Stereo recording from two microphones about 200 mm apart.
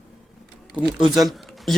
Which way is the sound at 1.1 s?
Centre (ahead or behind).